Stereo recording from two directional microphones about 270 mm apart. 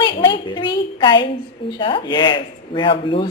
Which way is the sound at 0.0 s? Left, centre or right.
Centre.